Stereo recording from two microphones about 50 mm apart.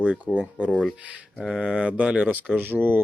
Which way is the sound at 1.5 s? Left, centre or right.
Centre.